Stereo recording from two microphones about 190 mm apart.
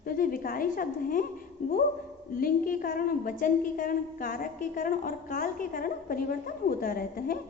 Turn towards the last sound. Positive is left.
turn(degrees=50)  # may be behind; listen again after turning